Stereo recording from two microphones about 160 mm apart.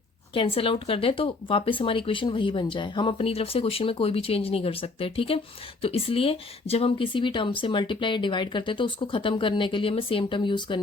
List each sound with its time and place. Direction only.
0.3 s speech: 35° left (ahead or behind)